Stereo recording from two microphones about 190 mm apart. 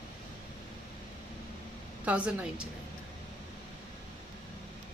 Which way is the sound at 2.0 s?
5° right (ahead or behind).